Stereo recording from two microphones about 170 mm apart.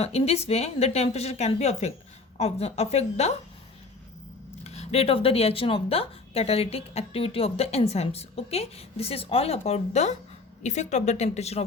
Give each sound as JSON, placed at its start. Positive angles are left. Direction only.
{"t": 0.0, "sound": "speech", "side_deg": 40}
{"t": 4.6, "sound": "speech", "side_deg": 40}